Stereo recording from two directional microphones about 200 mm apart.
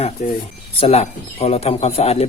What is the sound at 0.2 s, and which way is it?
Speech, 35° left (ahead or behind).